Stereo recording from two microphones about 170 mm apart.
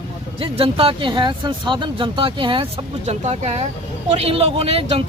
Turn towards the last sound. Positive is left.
turn(degrees=-35)  # may be behind; listen again after turning